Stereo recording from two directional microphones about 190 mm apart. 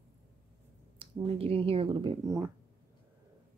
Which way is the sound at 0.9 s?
30° right (ahead or behind).